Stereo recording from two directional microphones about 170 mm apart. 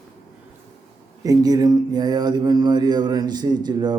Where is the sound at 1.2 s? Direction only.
20° right (ahead or behind).